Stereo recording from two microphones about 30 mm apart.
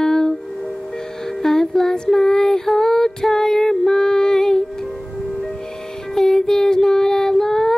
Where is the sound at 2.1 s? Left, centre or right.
Centre.